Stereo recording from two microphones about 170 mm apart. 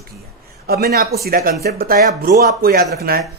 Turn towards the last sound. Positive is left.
turn(degrees=-65)  # may be behind; listen again after turning